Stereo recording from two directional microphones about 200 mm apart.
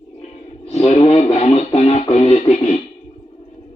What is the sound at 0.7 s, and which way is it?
Music, 30° left (ahead or behind).